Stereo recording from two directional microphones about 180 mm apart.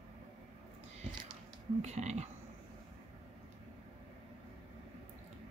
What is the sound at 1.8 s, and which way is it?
Speech, 40° right (ahead or behind).